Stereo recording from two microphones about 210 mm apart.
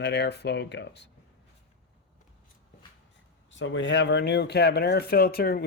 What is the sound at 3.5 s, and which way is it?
Speech, 65° left (ahead or behind).